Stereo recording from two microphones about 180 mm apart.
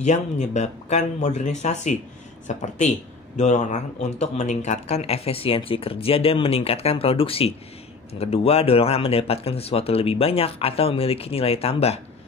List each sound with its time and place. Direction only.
0.0 s speech: 40° left (ahead or behind)